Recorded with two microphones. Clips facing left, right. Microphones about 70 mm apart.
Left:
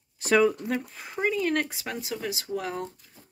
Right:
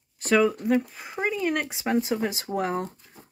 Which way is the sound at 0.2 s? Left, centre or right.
Centre.